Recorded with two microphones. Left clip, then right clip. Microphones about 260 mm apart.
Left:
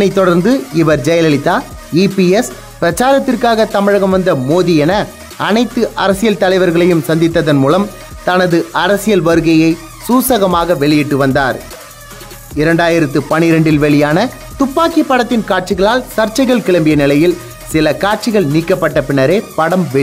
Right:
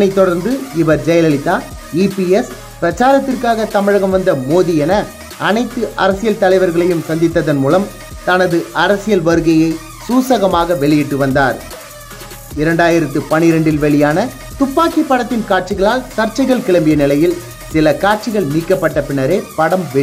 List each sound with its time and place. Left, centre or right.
0.0 s speech: left
12.5 s speech: left